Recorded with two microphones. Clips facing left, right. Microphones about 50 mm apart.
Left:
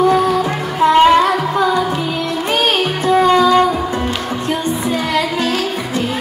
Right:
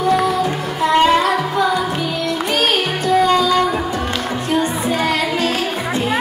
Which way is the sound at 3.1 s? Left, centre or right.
Left.